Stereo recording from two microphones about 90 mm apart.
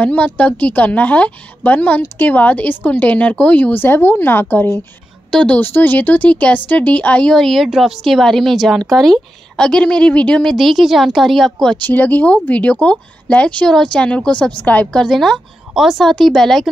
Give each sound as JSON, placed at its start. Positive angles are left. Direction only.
{"t": 0.0, "sound": "a woman's voice", "side_deg": 15}
{"t": 5.3, "sound": "speech", "side_deg": 10}
{"t": 5.6, "sound": "speech", "side_deg": 20}
{"t": 10.5, "sound": "a woman's voice", "side_deg": 0}
{"t": 11.6, "sound": "speech", "side_deg": 15}
{"t": 14.9, "sound": "a woman's voice", "side_deg": 5}